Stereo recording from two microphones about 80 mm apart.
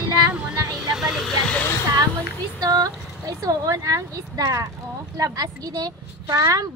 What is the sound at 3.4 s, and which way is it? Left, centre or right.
A woman's voice, right.